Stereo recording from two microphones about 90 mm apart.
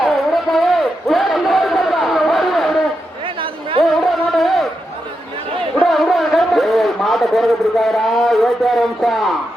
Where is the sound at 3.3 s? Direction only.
75° right (ahead or behind).